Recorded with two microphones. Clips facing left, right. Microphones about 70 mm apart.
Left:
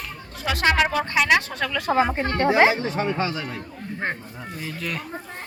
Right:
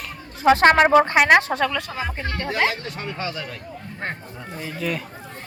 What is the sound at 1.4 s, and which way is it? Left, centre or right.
Speech, right.